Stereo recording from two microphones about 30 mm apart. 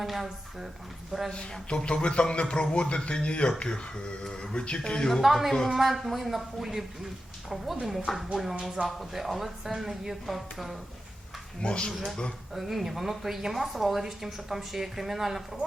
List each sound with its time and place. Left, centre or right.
0.0 s speech: centre
1.3 s a man's voice: left
4.5 s a man's voice: left
4.8 s speech: left
5.2 s speech: centre
8.8 s speech: right
9.1 s speech: centre
11.6 s a man's voice: left
12.5 s speech: centre